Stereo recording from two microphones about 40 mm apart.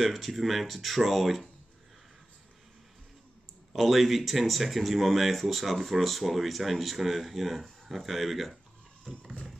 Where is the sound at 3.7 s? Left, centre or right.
Centre.